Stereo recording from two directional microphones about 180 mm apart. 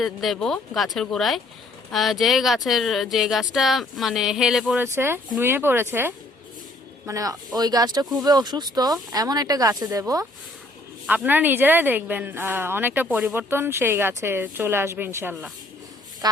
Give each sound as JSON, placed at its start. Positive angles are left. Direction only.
{"t": 0.0, "sound": "speech", "side_deg": 0}
{"t": 11.0, "sound": "speech", "side_deg": -10}
{"t": 16.2, "sound": "speech", "side_deg": -20}